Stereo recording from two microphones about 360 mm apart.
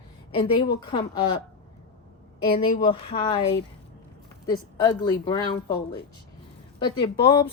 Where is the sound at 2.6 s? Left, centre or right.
Centre.